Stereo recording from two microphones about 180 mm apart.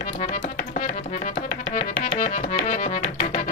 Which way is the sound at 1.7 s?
45° left (ahead or behind).